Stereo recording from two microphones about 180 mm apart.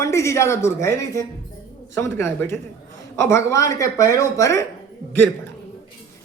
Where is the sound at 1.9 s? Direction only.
15° left (ahead or behind).